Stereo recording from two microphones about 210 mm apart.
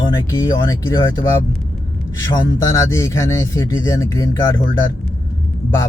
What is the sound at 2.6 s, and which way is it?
Speech, 15° left (ahead or behind).